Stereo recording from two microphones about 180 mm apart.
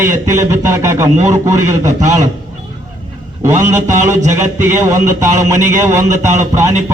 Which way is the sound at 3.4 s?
15° right (ahead or behind).